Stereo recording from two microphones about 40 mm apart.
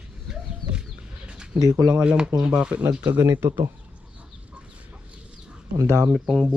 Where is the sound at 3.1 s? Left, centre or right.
Right.